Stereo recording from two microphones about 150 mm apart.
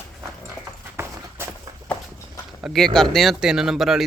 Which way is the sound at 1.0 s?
15° right (ahead or behind).